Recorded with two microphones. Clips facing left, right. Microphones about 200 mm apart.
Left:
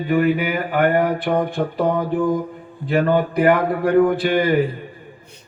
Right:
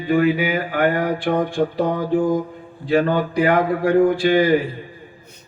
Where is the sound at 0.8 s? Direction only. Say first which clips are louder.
Left 2 dB; 55° left (ahead or behind).